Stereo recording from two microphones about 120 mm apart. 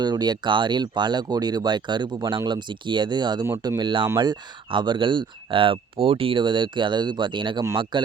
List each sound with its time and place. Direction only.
0.0 s speech: 35° right (ahead or behind)